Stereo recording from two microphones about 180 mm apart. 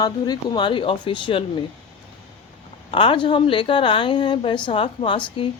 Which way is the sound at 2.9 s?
30° left (ahead or behind).